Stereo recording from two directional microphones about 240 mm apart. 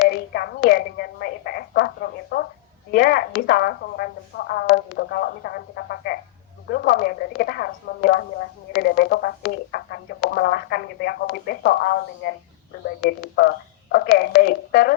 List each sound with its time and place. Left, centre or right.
0.0 s telephone: left
2.3 s a sound: left
2.9 s speech: left